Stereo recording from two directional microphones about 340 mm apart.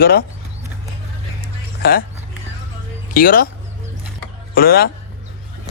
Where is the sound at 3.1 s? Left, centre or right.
Left.